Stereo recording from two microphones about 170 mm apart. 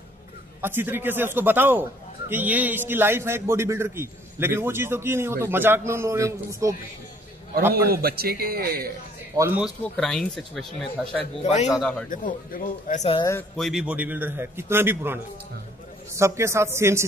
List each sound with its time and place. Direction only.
0.6 s a man's voice: 10° right (ahead or behind)
7.9 s a man's voice: 65° right (ahead or behind)
9.3 s speech: 20° right (ahead or behind)
9.9 s speech: 5° left (ahead or behind)
11.4 s speech: 45° left (ahead or behind)
11.7 s speech: 5° left (ahead or behind)
12.1 s speech: 55° left (ahead or behind)
13.6 s a man's voice: centre (ahead or behind)
16.2 s a man's voice: 15° right (ahead or behind)